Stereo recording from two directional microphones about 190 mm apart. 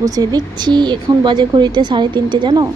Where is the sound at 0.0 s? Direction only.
20° right (ahead or behind).